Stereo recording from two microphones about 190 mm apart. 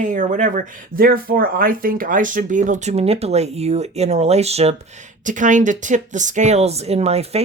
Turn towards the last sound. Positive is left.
turn(degrees=-35)  # may be behind; listen again after turning